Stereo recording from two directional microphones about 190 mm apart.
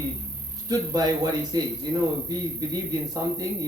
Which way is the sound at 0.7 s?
20° right (ahead or behind).